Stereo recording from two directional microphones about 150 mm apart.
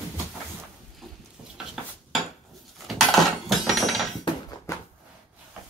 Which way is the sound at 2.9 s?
Centre (ahead or behind).